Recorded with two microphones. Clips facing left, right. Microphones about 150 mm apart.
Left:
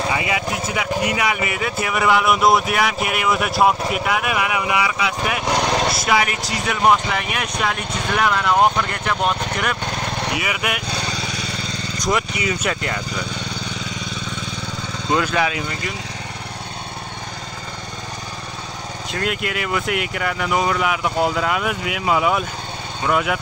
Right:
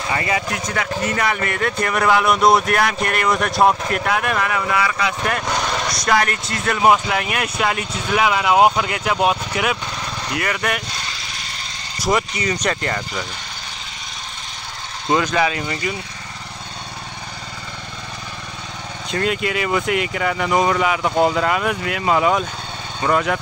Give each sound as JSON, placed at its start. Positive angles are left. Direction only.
{"t": 0.1, "sound": "speech", "side_deg": 5}
{"t": 5.7, "sound": "speech", "side_deg": 30}
{"t": 5.9, "sound": "speech", "side_deg": 5}
{"t": 10.3, "sound": "speech", "side_deg": 5}
{"t": 12.0, "sound": "speech", "side_deg": 0}
{"t": 15.3, "sound": "speech", "side_deg": 5}
{"t": 19.0, "sound": "speech", "side_deg": 0}